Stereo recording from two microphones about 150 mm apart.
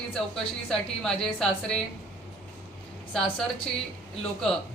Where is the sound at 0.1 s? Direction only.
5° left (ahead or behind).